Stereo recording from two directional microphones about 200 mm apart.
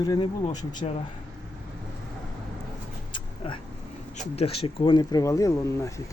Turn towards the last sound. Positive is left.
turn(degrees=15)  # may be behind; listen again after turning